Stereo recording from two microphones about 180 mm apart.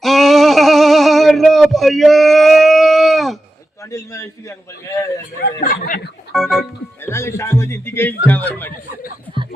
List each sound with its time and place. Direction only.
0.0 s a sound: centre (ahead or behind)
3.9 s a man's voice: 15° left (ahead or behind)
5.6 s speech: 55° left (ahead or behind)
6.3 s speech: centre (ahead or behind)
7.0 s a man's voice: 15° left (ahead or behind)